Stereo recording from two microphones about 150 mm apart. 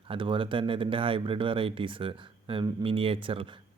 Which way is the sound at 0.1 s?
35° right (ahead or behind).